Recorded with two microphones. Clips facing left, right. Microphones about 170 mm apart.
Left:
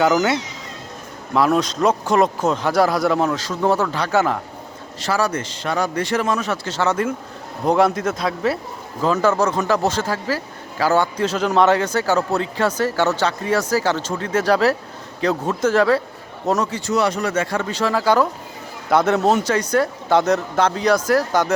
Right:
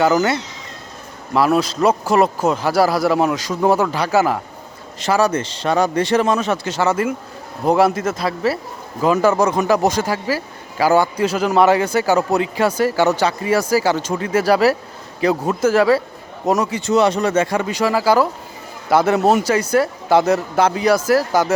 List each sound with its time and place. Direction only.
0.0 s speech: centre (ahead or behind)
4.9 s a man's voice: 20° right (ahead or behind)
6.7 s speech: 10° right (ahead or behind)
16.8 s speech: 25° right (ahead or behind); by 21.5 s 5° right (ahead or behind)